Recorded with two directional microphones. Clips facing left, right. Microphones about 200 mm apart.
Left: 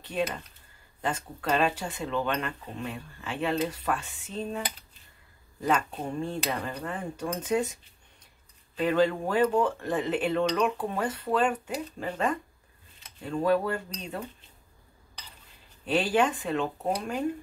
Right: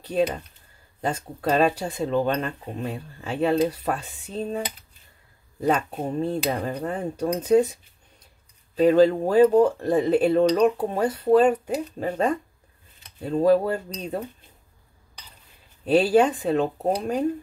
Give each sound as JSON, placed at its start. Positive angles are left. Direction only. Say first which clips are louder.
{"t": 0.0, "sound": "speech", "louder": "right 7 dB", "side_deg": -40}
{"t": 8.7, "sound": "speech", "louder": "right 8 dB", "side_deg": -40}
{"t": 15.8, "sound": "speech", "louder": "right 7 dB", "side_deg": -40}